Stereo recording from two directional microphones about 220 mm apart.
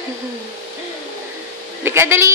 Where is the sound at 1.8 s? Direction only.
10° right (ahead or behind).